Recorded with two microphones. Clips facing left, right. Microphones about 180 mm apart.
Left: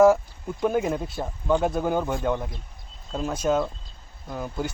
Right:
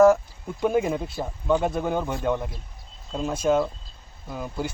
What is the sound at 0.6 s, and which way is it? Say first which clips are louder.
Speech: right 1 dB; centre (ahead or behind).